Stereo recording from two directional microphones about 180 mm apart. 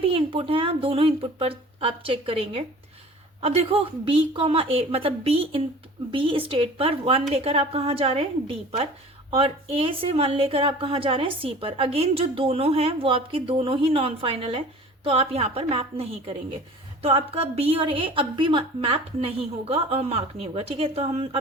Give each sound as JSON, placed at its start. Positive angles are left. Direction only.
{"t": 0.0, "sound": "speech", "side_deg": -30}